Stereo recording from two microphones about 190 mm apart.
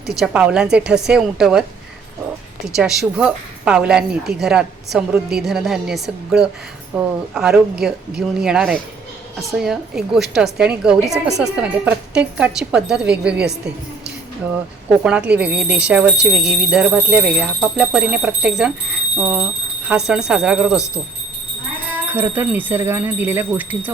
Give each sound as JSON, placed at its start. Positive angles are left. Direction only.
{"t": 0.1, "sound": "a woman's voice", "side_deg": -5}
{"t": 2.6, "sound": "a woman's voice", "side_deg": 0}
{"t": 15.0, "sound": "a woman's voice", "side_deg": -5}
{"t": 22.1, "sound": "speech", "side_deg": -10}